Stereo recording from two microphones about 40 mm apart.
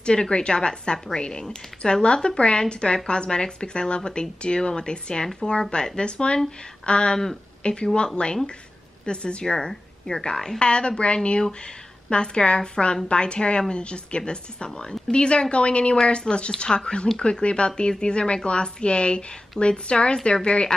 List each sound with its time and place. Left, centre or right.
0.0 s a woman's voice: left
10.6 s a woman's voice: left